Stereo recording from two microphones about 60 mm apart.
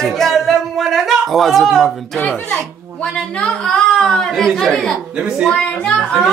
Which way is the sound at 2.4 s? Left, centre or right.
Centre.